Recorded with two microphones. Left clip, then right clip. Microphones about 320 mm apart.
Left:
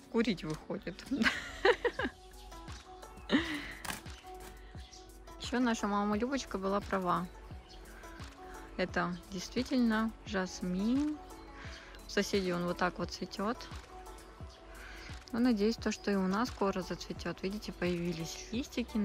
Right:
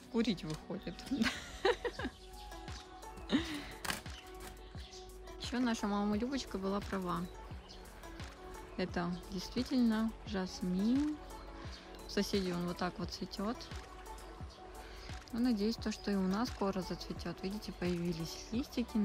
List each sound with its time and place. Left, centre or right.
0.1 s speech: centre
3.3 s music: centre
5.4 s speech: centre
8.7 s speech: centre
12.1 s speech: centre
15.3 s speech: centre